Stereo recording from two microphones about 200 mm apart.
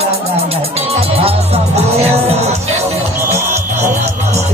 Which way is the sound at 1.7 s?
30° right (ahead or behind).